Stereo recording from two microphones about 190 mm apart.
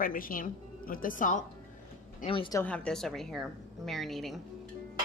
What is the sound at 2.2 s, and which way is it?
Speech, 25° left (ahead or behind).